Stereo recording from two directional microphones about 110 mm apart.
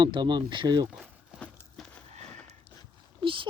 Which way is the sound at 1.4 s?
10° left (ahead or behind).